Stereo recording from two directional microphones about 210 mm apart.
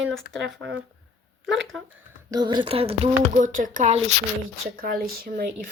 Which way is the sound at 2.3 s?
20° right (ahead or behind).